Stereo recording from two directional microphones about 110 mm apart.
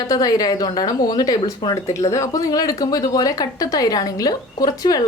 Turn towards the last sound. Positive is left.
turn(degrees=35)  # may be behind; listen again after turning